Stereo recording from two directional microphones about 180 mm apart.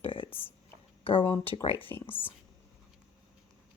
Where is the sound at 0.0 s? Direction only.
30° left (ahead or behind).